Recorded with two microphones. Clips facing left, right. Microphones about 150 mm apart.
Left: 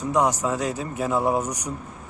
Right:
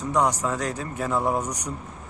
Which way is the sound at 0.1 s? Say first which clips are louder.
Left 1 dB; 5° left (ahead or behind).